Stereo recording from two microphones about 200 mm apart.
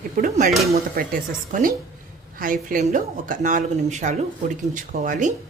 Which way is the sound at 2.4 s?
45° right (ahead or behind).